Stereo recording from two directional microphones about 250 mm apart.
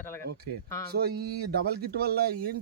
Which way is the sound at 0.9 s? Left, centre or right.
Right.